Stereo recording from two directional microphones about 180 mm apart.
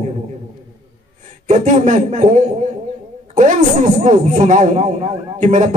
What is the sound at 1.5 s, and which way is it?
A man's voice, 45° right (ahead or behind).